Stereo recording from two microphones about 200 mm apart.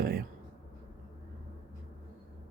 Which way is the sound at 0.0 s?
50° right (ahead or behind).